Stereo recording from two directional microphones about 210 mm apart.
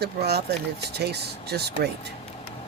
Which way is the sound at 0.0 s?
50° right (ahead or behind).